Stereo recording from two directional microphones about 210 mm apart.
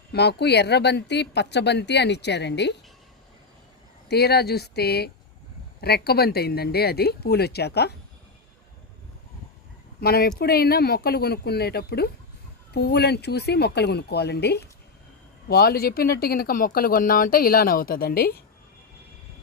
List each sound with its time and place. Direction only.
0.1 s speech: 50° left (ahead or behind)
4.1 s speech: 50° left (ahead or behind)
10.0 s speech: 50° left (ahead or behind)